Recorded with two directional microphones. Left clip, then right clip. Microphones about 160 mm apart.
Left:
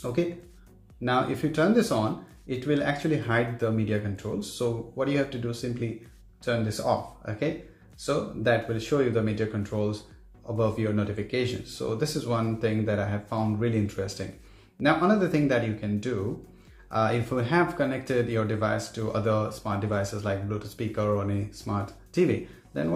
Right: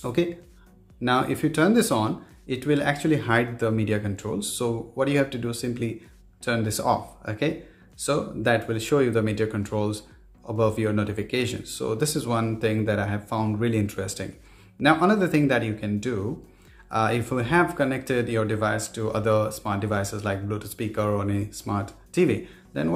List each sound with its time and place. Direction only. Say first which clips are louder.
0.0 s speech: right 3 dB; 35° right (ahead or behind)